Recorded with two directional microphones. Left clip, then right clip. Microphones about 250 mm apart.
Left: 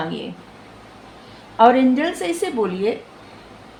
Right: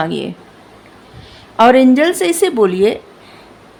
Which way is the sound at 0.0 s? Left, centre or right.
Right.